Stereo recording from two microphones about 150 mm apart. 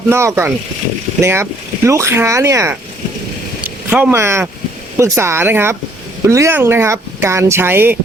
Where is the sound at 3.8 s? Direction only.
15° right (ahead or behind).